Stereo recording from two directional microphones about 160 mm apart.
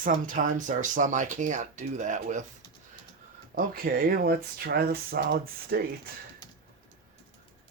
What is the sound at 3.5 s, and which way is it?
Speech, 65° right (ahead or behind).